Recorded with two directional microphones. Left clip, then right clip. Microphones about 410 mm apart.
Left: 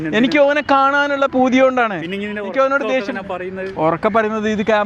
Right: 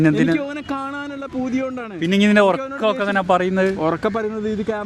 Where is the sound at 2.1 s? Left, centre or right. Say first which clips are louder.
Right 10 dB; right.